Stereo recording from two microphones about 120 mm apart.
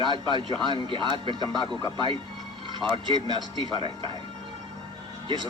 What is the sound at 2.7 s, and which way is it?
Speech, 45° right (ahead or behind).